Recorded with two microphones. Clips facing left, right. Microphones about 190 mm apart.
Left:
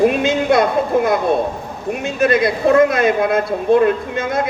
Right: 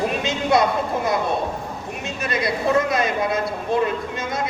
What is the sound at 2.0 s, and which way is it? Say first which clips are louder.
Speech: left 10 dB; 55° left (ahead or behind).